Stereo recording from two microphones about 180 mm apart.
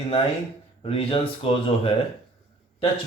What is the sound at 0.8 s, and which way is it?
Speech, 30° left (ahead or behind).